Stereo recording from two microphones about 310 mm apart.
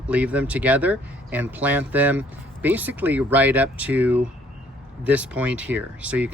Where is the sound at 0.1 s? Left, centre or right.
Centre.